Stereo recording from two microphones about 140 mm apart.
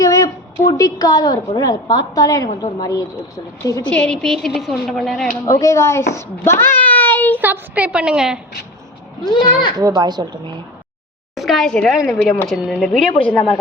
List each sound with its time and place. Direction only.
0.0 s a woman's voice: 25° left (ahead or behind)
3.8 s a woman's voice: 5° left (ahead or behind)
5.5 s speech: 25° left (ahead or behind)
6.1 s a sound: 15° left (ahead or behind)
7.3 s a woman's voice: 15° right (ahead or behind)
9.3 s speech: 35° left (ahead or behind)
9.7 s a woman's voice: 30° right (ahead or behind)
11.3 s a woman's voice: centre (ahead or behind)